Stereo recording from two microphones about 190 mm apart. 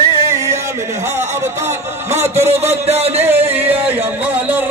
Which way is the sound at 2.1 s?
35° right (ahead or behind).